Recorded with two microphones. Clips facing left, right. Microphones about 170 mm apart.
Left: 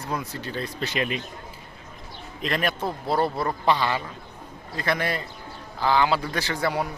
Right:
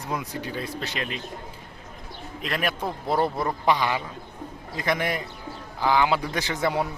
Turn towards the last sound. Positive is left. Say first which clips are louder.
# right 1 dB
turn(degrees=-20)  # may be behind; listen again after turning